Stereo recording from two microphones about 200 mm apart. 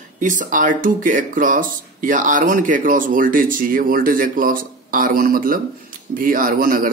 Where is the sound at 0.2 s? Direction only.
40° right (ahead or behind).